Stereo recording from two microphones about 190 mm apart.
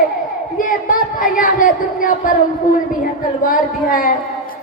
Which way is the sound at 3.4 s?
45° left (ahead or behind).